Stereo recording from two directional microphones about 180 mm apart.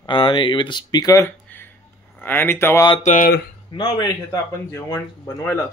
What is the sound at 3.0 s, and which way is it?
Speech, 45° left (ahead or behind).